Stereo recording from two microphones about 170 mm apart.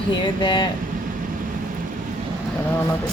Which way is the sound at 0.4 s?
30° left (ahead or behind).